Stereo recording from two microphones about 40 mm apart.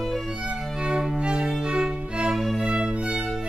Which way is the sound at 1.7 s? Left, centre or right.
Right.